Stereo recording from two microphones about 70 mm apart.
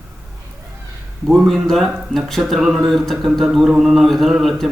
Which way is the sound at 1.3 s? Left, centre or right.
Centre.